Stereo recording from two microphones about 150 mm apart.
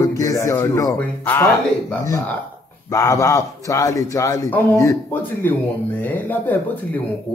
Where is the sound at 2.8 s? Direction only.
20° left (ahead or behind).